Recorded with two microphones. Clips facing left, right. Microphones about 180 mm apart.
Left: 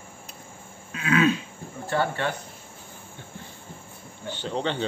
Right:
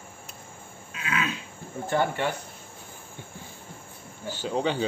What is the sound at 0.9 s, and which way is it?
Cough, 55° left (ahead or behind).